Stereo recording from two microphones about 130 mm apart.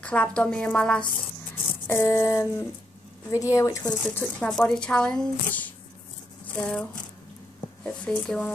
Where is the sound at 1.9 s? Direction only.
20° left (ahead or behind).